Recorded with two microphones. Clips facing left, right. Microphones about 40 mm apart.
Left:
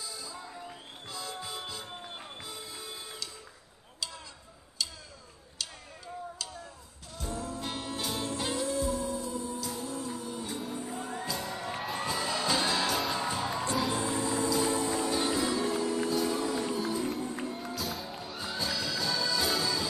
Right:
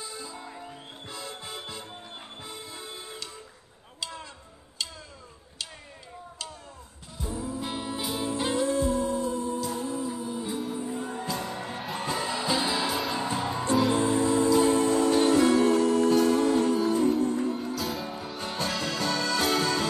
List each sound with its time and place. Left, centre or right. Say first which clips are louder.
0.0 s music: right 3 dB; right
4.8 s tick-tock: right 1 dB; right
7.2 s music: right 3 dB; centre
8.4 s music: right 7 dB; right
9.8 s music: right 5 dB; centre
11.0 s music: right 4 dB; right
12.4 s music: right 1 dB; centre
13.2 s music: right 3 dB; right
17.5 s music: right 6 dB; centre
18.4 s music: right 3 dB; right